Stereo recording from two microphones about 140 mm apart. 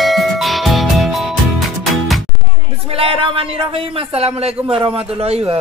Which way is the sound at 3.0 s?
40° right (ahead or behind).